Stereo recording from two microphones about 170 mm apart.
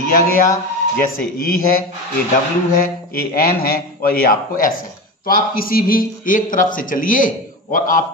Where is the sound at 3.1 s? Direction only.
60° left (ahead or behind).